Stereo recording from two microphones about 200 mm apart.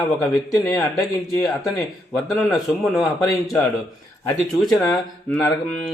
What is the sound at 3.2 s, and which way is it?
Speech, 15° left (ahead or behind).